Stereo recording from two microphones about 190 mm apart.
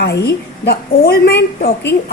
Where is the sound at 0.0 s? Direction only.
60° left (ahead or behind).